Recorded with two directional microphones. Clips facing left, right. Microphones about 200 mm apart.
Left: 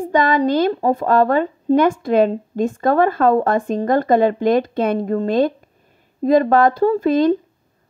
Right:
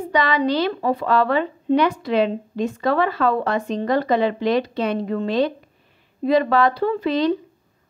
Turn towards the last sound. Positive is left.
turn(degrees=50)  # may be behind; listen again after turning